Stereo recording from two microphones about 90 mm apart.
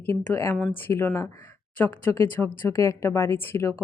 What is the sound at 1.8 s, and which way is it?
A woman's voice, 20° left (ahead or behind).